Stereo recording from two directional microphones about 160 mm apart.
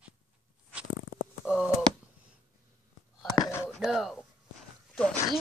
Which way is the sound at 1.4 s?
5° right (ahead or behind).